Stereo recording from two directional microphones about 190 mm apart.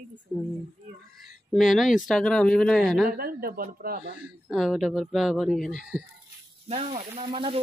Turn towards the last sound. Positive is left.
turn(degrees=-25)  # may be behind; listen again after turning